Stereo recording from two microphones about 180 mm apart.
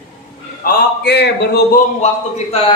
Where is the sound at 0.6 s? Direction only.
70° left (ahead or behind).